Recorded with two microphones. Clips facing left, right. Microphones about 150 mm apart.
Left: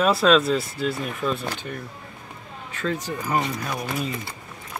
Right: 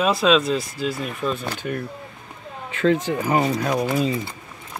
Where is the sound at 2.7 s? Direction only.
90° right.